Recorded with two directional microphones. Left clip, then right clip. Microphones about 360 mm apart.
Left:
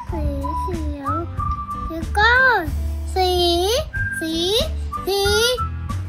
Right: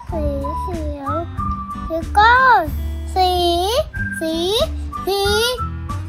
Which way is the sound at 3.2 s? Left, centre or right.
Centre.